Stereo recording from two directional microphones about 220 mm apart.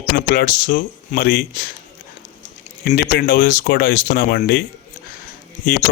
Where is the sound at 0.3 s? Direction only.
40° left (ahead or behind).